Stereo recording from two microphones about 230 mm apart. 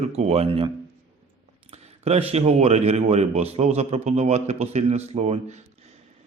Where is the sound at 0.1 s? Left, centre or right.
Right.